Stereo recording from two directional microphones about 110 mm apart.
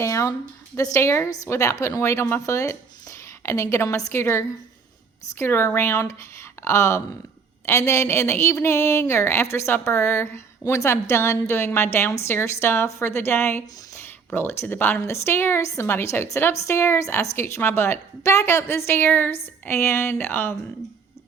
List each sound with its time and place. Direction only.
0.0 s speech: 25° left (ahead or behind)
18.9 s a woman's voice: 15° left (ahead or behind)